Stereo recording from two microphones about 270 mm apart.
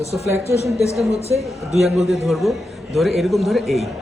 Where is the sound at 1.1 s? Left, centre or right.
Right.